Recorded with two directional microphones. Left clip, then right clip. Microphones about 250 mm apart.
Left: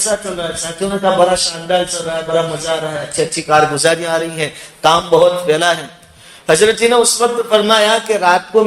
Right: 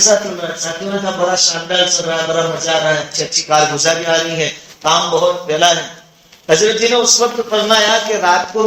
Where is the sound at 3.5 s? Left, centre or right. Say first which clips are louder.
Left 1 dB; left.